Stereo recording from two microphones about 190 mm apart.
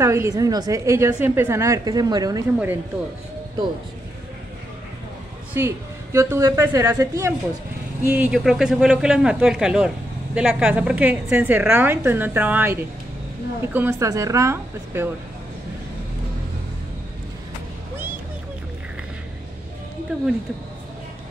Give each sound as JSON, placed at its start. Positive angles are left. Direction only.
{"t": 0.0, "sound": "a man's voice", "side_deg": -15}
{"t": 5.5, "sound": "a man's voice", "side_deg": -15}
{"t": 13.7, "sound": "a man's voice", "side_deg": -15}